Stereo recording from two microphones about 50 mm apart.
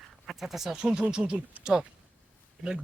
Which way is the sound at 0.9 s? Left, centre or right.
Right.